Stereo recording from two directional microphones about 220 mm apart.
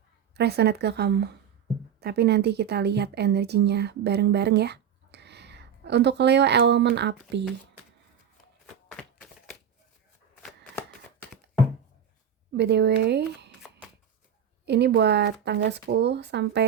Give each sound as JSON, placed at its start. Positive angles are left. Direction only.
{"t": 0.3, "sound": "speech", "side_deg": -45}
{"t": 8.6, "sound": "a sound", "side_deg": 0}
{"t": 12.5, "sound": "speech", "side_deg": -50}
{"t": 14.6, "sound": "speech", "side_deg": -50}